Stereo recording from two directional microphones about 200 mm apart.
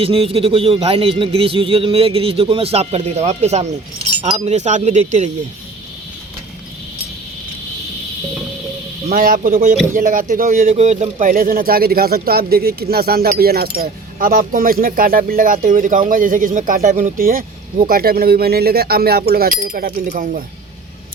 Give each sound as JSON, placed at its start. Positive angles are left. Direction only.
{"t": 0.0, "sound": "a man's voice", "side_deg": -30}
{"t": 9.0, "sound": "speech", "side_deg": -45}